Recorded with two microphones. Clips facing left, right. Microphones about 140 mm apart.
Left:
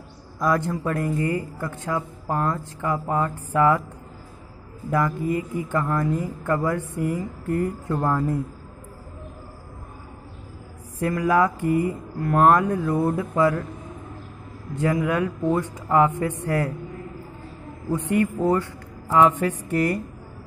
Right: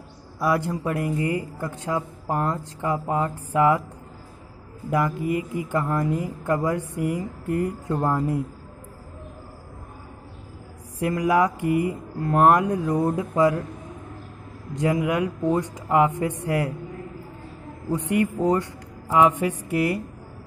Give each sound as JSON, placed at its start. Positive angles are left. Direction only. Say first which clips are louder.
{"t": 0.4, "sound": "a man's voice", "louder": "left 1 dB", "side_deg": -10}
{"t": 4.9, "sound": "a man's voice", "louder": "even", "side_deg": -15}
{"t": 11.0, "sound": "a man's voice", "louder": "even", "side_deg": -15}
{"t": 14.8, "sound": "a man's voice", "louder": "even", "side_deg": -15}
{"t": 17.9, "sound": "a man's voice", "louder": "left 1 dB", "side_deg": -15}